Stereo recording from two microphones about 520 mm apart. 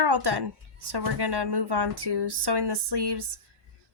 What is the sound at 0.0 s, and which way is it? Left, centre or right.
A woman's voice, right.